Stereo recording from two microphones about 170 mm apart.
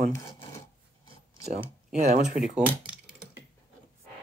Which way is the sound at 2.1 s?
50° right (ahead or behind).